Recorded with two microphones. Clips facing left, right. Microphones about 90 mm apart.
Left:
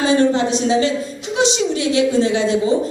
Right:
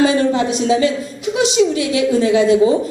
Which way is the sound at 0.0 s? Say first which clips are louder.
Right 1 dB; 30° left (ahead or behind).